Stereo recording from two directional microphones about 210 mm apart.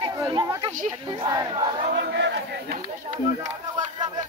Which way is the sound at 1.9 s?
55° right (ahead or behind).